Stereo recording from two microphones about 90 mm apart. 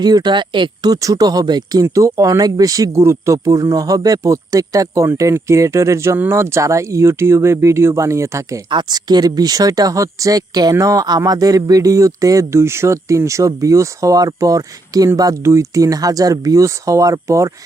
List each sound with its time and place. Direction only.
0.0 s speech: 50° right (ahead or behind); by 8.6 s 35° right (ahead or behind)
8.7 s speech: 55° right (ahead or behind); by 17.5 s 35° right (ahead or behind)